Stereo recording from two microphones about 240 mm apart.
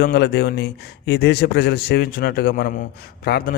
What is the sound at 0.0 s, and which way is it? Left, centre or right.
Speech, left.